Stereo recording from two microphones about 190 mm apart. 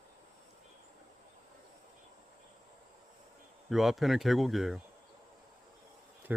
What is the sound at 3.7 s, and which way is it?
Speech, centre (ahead or behind).